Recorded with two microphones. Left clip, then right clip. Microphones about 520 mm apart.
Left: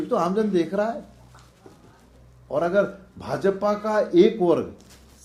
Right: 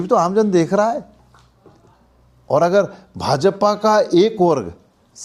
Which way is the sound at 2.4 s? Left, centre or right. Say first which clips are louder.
Right 7 dB; right.